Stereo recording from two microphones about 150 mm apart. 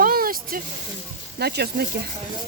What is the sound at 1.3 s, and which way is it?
Speech, 90° right.